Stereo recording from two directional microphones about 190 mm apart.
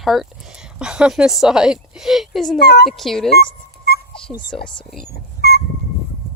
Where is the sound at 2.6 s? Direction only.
60° left (ahead or behind).